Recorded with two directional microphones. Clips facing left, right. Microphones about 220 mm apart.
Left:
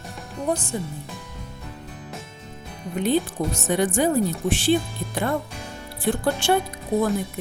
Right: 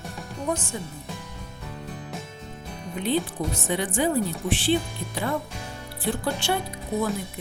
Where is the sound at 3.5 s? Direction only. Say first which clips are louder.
Left 6 dB; 45° left (ahead or behind).